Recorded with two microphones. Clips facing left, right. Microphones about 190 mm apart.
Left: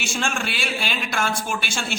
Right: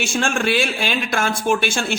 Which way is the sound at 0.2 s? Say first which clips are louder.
Right 8 dB; 50° right (ahead or behind).